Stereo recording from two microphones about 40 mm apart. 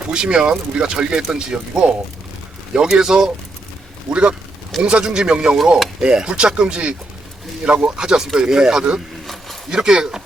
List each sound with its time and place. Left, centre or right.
0.1 s speech: right
9.2 s a sound: centre
9.6 s speech: centre